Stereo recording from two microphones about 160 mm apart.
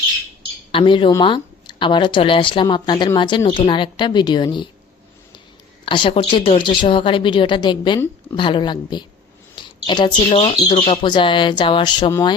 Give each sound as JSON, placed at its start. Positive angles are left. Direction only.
{"t": 0.7, "sound": "speech", "side_deg": 35}
{"t": 5.8, "sound": "a woman's voice", "side_deg": 30}
{"t": 9.6, "sound": "a sound", "side_deg": 30}
{"t": 10.5, "sound": "a woman's voice", "side_deg": 30}